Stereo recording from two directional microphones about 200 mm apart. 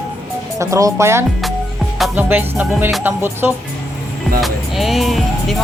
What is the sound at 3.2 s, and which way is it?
Speech, 10° right (ahead or behind).